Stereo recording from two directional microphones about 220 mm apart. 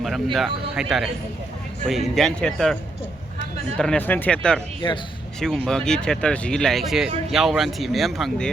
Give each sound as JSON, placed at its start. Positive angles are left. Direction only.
{"t": 0.3, "sound": "speech", "side_deg": 0}
{"t": 3.8, "sound": "speech", "side_deg": 5}
{"t": 4.8, "sound": "speech", "side_deg": 20}
{"t": 5.4, "sound": "speech", "side_deg": 0}